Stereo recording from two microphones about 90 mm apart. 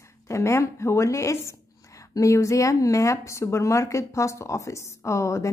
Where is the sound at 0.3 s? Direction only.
30° left (ahead or behind).